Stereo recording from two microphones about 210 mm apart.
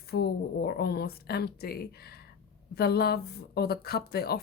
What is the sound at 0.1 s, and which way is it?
A woman's voice, 50° left (ahead or behind).